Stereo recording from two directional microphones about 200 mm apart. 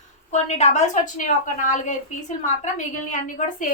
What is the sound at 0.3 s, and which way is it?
A woman's voice, 35° left (ahead or behind).